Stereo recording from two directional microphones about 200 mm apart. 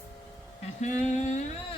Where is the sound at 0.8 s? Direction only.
35° left (ahead or behind).